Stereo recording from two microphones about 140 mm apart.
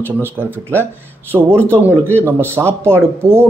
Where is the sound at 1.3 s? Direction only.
5° right (ahead or behind).